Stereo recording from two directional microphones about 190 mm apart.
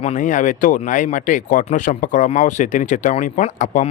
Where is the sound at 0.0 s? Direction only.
40° left (ahead or behind).